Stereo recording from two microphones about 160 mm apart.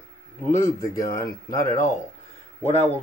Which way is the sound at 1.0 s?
65° left (ahead or behind).